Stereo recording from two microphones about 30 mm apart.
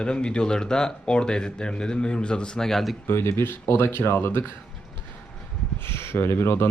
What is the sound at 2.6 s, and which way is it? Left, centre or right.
Speech, centre.